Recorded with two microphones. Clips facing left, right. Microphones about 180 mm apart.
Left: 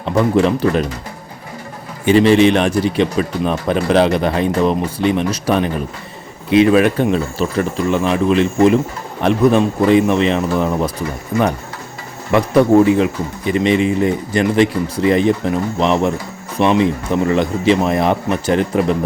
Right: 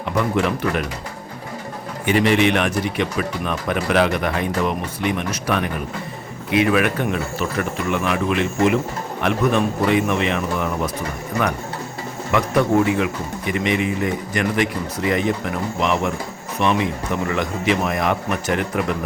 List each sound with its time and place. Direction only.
0.0 s speech: 30° left (ahead or behind)
2.0 s speech: 30° left (ahead or behind)
12.3 s speech: 30° left (ahead or behind)